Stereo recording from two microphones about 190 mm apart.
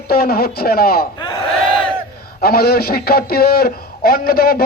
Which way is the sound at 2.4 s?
55° left (ahead or behind).